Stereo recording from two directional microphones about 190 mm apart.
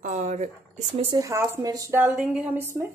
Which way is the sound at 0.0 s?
40° right (ahead or behind).